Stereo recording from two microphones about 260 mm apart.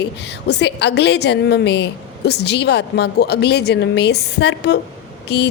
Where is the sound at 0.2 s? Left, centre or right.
Left.